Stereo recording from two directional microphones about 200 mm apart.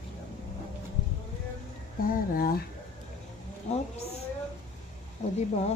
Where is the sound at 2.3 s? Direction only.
50° left (ahead or behind).